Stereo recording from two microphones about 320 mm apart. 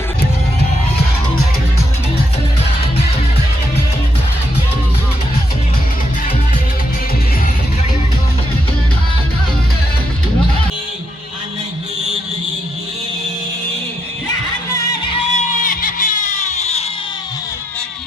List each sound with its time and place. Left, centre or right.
15.1 s music: left